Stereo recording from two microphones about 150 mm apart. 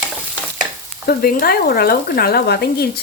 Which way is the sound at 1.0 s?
90° left.